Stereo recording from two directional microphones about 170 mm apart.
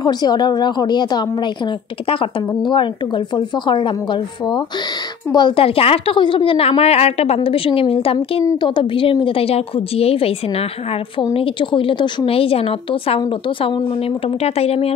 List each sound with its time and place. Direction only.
0.0 s a woman's voice: 25° left (ahead or behind)